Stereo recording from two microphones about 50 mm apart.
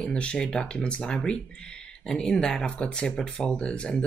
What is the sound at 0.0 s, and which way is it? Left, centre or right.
Speech, left.